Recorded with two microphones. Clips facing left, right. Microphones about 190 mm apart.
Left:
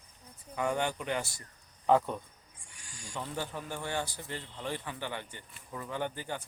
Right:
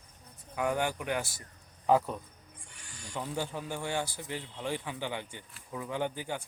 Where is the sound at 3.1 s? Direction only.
10° right (ahead or behind).